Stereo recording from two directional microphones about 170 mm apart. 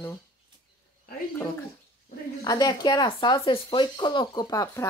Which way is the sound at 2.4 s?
25° left (ahead or behind).